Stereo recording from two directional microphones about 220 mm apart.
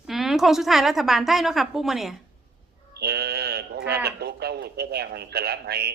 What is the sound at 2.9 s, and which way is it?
Speech, 45° right (ahead or behind).